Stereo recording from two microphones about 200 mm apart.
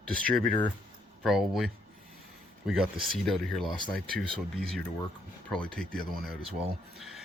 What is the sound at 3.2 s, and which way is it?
Speech, centre (ahead or behind).